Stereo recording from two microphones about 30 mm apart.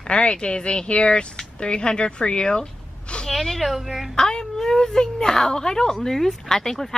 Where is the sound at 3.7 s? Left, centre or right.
Centre.